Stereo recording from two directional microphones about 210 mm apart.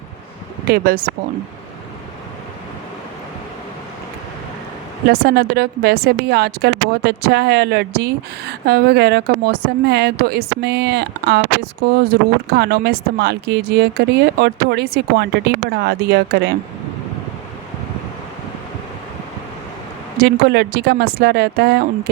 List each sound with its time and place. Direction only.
0.7 s speech: 45° right (ahead or behind)
5.0 s speech: 50° right (ahead or behind)
20.2 s speech: 50° right (ahead or behind)